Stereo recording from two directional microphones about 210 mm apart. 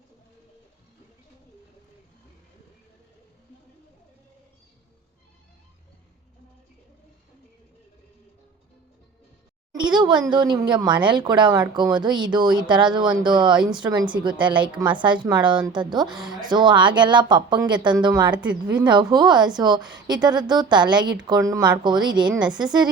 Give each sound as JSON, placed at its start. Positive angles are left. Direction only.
{"t": 9.7, "sound": "a sound", "side_deg": -20}
{"t": 10.2, "sound": "speech", "side_deg": -20}
{"t": 16.0, "sound": "speech", "side_deg": 0}
{"t": 16.4, "sound": "speech", "side_deg": -20}